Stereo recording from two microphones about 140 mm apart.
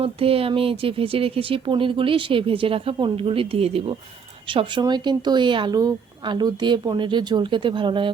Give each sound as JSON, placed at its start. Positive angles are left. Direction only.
{"t": 0.0, "sound": "speech", "side_deg": -40}